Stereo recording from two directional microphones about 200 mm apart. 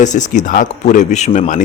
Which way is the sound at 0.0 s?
40° left (ahead or behind).